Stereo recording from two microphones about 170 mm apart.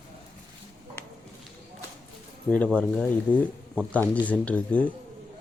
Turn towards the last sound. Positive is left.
turn(degrees=10)  # may be behind; listen again after turning